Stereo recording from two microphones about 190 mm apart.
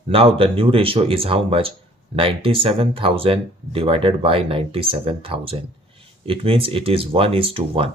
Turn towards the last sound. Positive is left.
turn(degrees=-30)  # may be behind; listen again after turning